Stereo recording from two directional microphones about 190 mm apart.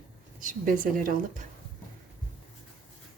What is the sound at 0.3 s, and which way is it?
A woman's voice, 45° right (ahead or behind).